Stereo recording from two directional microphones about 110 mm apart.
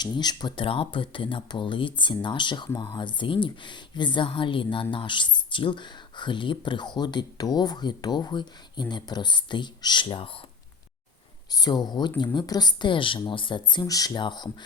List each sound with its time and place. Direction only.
0.0 s speech: 40° left (ahead or behind)
11.5 s speech: 40° left (ahead or behind)